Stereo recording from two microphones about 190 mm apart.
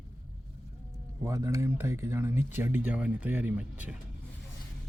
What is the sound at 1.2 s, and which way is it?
Speech, 15° right (ahead or behind).